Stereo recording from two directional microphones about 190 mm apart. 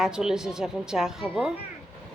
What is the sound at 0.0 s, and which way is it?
Speech, 5° right (ahead or behind).